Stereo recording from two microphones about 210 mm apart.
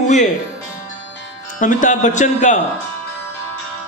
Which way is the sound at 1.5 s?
35° left (ahead or behind).